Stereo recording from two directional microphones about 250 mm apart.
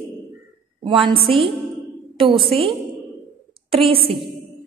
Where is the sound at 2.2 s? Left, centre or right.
Right.